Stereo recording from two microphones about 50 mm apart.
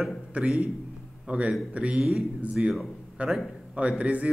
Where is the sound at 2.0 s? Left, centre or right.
Centre.